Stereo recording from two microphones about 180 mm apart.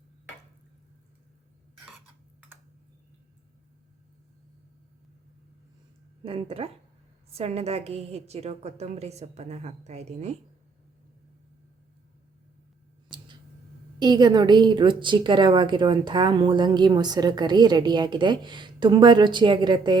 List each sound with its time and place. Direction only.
6.2 s a woman's voice: 30° right (ahead or behind)
14.0 s a woman's voice: 25° right (ahead or behind)